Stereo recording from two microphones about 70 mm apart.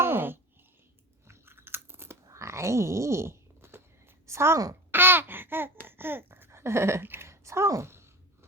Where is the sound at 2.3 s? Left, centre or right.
Right.